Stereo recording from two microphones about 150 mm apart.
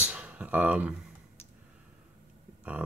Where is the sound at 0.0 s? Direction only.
10° right (ahead or behind).